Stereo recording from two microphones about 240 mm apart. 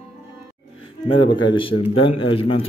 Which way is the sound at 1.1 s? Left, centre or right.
Centre.